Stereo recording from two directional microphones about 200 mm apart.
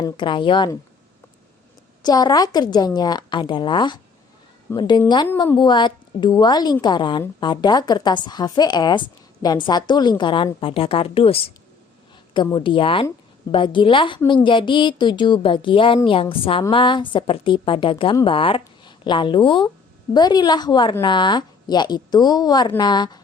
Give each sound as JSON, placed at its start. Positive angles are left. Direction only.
{"t": 0.0, "sound": "a woman's voice", "side_deg": 25}
{"t": 2.0, "sound": "a woman's voice", "side_deg": 20}